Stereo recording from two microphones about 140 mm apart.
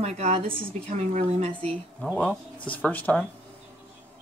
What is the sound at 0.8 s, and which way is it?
Speech, 55° right (ahead or behind).